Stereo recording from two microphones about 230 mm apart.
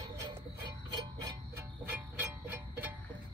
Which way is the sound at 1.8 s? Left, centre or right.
Centre.